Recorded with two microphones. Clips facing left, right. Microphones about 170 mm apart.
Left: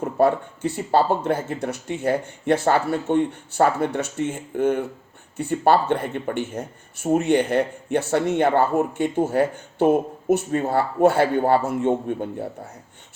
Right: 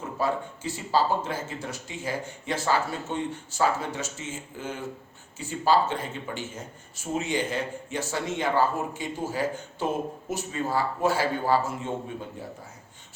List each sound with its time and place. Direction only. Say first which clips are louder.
0.0 s speech: left 9 dB; 60° left (ahead or behind)